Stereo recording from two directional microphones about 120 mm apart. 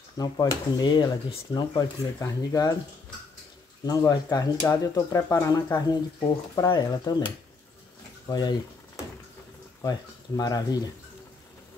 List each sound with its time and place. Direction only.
0.2 s speech: 30° left (ahead or behind)
4.1 s speech: 30° left (ahead or behind)
8.3 s speech: 35° left (ahead or behind)
9.8 s speech: 35° left (ahead or behind)